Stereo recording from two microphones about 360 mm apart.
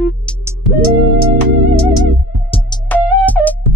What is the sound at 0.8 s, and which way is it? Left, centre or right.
Music, left.